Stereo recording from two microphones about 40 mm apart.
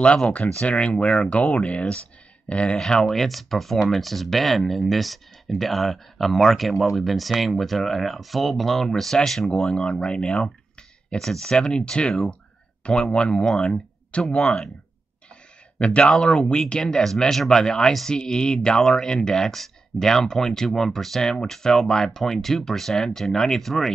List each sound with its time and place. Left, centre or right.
0.0 s speech: left
2.8 s speech: centre
3.1 s speech: centre
9.8 s speech: left
13.5 s speech: centre
15.8 s speech: left
17.0 s speech: centre